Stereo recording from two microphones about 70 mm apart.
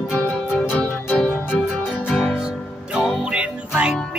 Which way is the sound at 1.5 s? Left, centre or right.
Centre.